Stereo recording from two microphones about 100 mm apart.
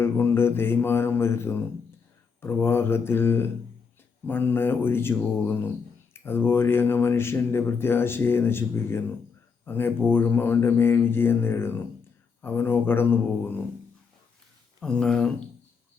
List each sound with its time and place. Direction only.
0.0 s speech: 25° left (ahead or behind)
14.8 s speech: 10° left (ahead or behind)